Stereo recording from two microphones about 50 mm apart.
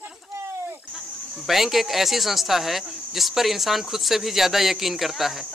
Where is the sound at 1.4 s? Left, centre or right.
Centre.